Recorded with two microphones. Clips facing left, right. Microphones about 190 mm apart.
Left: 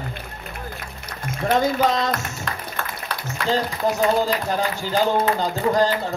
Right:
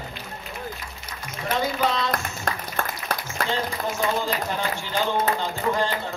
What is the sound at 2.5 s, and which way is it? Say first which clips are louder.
Applause: right 4 dB; 45° right (ahead or behind).